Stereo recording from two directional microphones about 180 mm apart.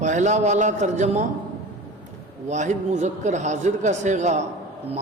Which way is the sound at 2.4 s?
40° right (ahead or behind).